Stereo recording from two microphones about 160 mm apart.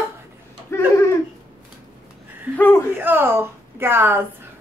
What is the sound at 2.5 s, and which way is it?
Speech, 15° left (ahead or behind).